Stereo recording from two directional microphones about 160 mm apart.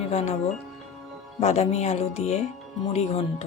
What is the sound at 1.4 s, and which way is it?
Speech, 40° left (ahead or behind).